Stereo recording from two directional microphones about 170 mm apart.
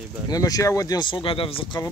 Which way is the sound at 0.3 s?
20° left (ahead or behind).